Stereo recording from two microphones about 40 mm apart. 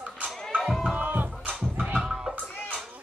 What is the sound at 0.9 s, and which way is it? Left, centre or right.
Music, right.